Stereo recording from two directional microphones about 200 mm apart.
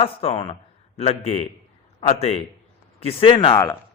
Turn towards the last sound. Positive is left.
turn(degrees=10)  # may be behind; listen again after turning